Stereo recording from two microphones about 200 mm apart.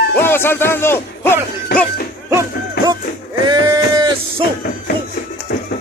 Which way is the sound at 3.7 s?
20° right (ahead or behind).